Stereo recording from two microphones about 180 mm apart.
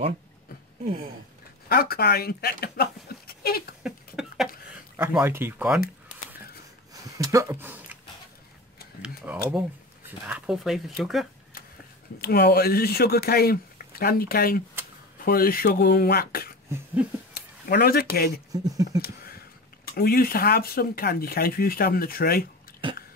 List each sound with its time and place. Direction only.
1.7 s speech: 60° left (ahead or behind)
3.8 s a sound: 5° right (ahead or behind)
4.9 s speech: 10° right (ahead or behind)
6.9 s a sound: 20° right (ahead or behind)
9.0 s tick-tock: 5° right (ahead or behind)
10.2 s speech: 5° right (ahead or behind)
12.2 s speech: 60° left (ahead or behind)
16.6 s a sound: 15° right (ahead or behind)
17.3 s speech: 55° left (ahead or behind)
18.5 s speech: 20° right (ahead or behind)
18.9 s speech: 55° left (ahead or behind)